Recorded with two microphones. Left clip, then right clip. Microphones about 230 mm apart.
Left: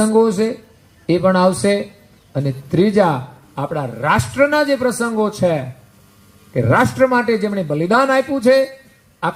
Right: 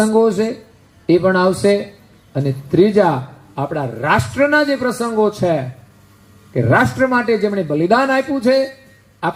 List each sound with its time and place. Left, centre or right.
0.1 s a man's voice: left